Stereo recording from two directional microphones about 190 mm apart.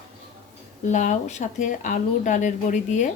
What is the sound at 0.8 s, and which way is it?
Speech, 40° left (ahead or behind).